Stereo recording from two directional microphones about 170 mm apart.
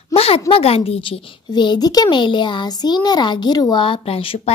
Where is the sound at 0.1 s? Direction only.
35° left (ahead or behind).